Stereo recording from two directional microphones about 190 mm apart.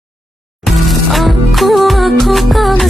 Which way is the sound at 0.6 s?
Centre (ahead or behind).